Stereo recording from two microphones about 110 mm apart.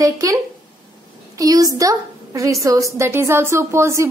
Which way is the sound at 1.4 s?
35° right (ahead or behind).